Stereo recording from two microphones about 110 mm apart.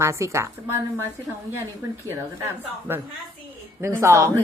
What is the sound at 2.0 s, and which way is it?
Speech, 25° right (ahead or behind).